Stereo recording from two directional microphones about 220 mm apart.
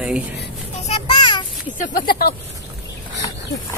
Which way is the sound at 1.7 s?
40° left (ahead or behind).